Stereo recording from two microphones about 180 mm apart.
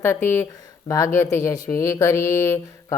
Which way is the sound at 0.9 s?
15° left (ahead or behind).